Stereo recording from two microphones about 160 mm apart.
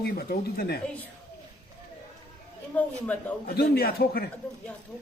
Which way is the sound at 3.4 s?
80° left.